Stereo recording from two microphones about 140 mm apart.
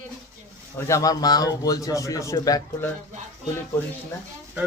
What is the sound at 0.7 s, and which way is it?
Speech, 20° left (ahead or behind).